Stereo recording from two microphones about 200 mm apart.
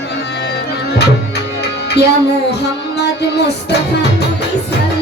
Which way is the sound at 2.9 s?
55° left (ahead or behind).